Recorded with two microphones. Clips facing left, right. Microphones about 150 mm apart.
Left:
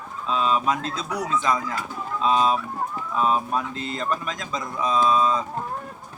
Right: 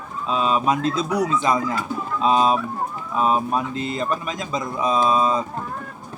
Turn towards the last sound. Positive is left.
turn(degrees=-10)  # may be behind; listen again after turning